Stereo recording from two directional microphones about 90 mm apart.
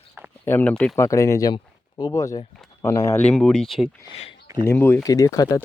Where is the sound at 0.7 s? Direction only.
15° left (ahead or behind).